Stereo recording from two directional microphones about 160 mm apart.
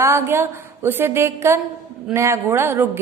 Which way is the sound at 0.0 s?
15° right (ahead or behind).